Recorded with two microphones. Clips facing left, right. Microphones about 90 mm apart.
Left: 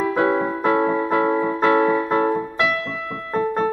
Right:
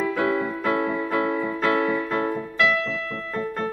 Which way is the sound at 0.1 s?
45° left (ahead or behind).